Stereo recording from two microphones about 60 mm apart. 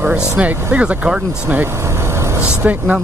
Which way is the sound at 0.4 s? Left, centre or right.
Right.